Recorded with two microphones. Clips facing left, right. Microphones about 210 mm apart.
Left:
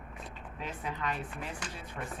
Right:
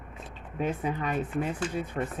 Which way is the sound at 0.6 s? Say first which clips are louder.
Right 9 dB; 50° right (ahead or behind).